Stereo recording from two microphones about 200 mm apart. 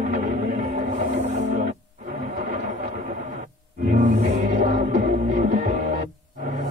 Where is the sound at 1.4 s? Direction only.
40° right (ahead or behind).